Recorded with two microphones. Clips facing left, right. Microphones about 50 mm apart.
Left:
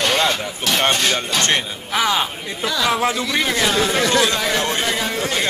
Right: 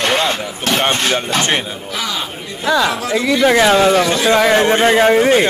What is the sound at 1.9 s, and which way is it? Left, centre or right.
Speech, left.